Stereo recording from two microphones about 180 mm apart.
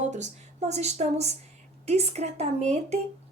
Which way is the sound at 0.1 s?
40° right (ahead or behind).